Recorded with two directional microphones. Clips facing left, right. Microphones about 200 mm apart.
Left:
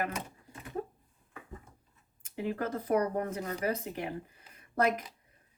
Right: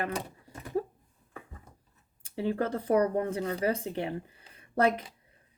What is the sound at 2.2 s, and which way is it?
Speech, 30° right (ahead or behind).